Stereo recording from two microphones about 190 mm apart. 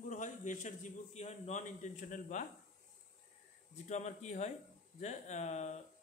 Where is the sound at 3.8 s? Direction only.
35° left (ahead or behind).